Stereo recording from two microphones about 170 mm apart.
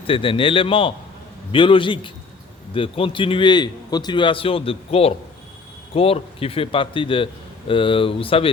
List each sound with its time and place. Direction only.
0.1 s a man's voice: 30° left (ahead or behind)